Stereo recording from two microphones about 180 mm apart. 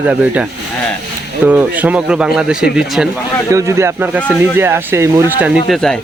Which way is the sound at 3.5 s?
15° right (ahead or behind).